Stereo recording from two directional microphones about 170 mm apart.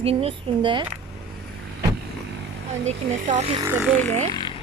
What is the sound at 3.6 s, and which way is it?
Speech, 15° right (ahead or behind).